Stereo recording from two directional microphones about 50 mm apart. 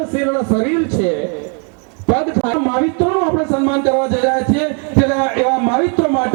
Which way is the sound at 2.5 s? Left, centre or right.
Left.